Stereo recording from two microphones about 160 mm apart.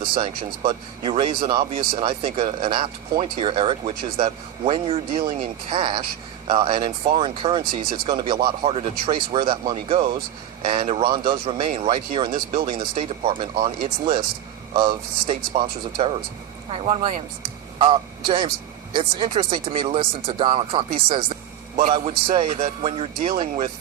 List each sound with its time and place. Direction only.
0.0 s speech: 30° right (ahead or behind)
12.3 s speech: 55° right (ahead or behind)
12.6 s speech: 30° right (ahead or behind)
17.7 s a man's voice: 30° right (ahead or behind)